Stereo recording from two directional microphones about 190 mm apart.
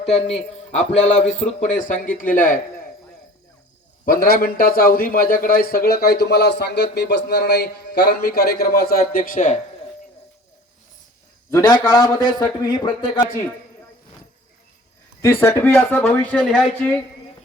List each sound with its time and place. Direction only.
0.0 s a man's voice: 35° left (ahead or behind)
4.0 s a man's voice: 50° left (ahead or behind)
11.5 s a man's voice: 20° left (ahead or behind)
15.2 s speech: 10° left (ahead or behind)